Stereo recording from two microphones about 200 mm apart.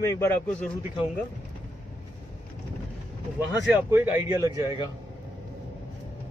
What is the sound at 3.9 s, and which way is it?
Speech, 10° right (ahead or behind).